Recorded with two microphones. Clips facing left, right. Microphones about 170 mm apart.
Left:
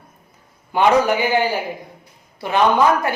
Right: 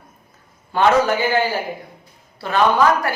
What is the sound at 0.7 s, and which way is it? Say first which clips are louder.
A man's voice: left 1 dB; 15° left (ahead or behind).